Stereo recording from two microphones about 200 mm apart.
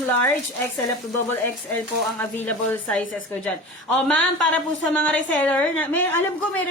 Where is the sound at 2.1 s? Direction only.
10° left (ahead or behind).